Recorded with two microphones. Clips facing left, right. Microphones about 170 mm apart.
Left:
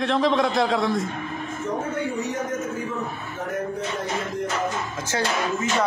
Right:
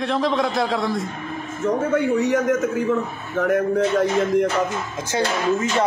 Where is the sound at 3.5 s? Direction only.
90° right.